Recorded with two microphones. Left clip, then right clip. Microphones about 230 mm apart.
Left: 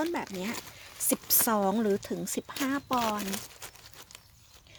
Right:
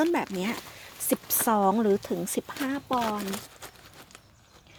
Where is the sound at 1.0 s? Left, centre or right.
Centre.